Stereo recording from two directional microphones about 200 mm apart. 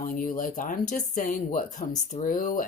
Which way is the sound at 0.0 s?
45° left (ahead or behind).